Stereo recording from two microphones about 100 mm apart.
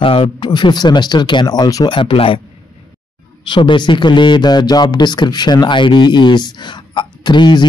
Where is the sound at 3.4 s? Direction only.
55° left (ahead or behind).